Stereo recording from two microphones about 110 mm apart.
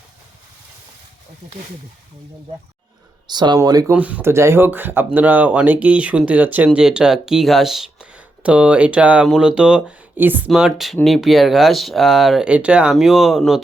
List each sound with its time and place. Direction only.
3.2 s speech: 40° right (ahead or behind)
3.9 s speech: 15° right (ahead or behind)
10.5 s speech: 5° right (ahead or behind)